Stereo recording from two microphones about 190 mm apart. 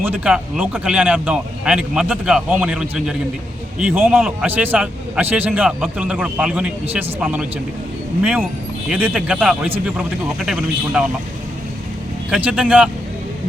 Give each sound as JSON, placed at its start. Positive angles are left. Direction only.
{"t": 0.0, "sound": "a man's voice", "side_deg": -10}
{"t": 12.3, "sound": "a man's voice", "side_deg": -5}